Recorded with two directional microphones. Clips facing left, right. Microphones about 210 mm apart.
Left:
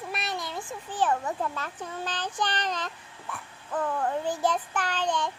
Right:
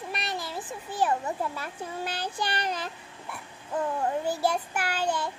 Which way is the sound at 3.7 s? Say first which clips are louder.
Even; 20° right (ahead or behind).